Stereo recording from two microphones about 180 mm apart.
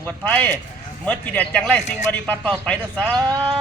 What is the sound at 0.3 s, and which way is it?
Speech, 10° left (ahead or behind).